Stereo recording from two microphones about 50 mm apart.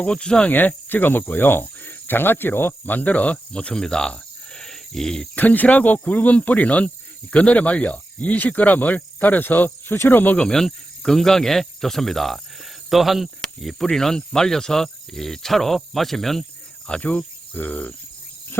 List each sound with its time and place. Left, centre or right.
0.0 s speech: centre
0.5 s cricket: left
3.3 s cricket: left
5.3 s speech: left
10.3 s cricket: centre
12.9 s speech: centre
13.8 s cricket: centre
14.3 s speech: centre
17.0 s cricket: left